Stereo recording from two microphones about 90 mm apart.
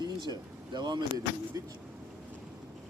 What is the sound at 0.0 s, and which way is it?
Speech, 55° right (ahead or behind).